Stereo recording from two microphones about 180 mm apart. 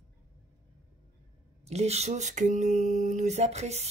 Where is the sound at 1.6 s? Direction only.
35° right (ahead or behind).